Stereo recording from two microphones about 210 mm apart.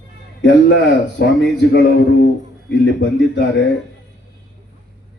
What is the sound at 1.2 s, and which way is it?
Speech, 55° left (ahead or behind).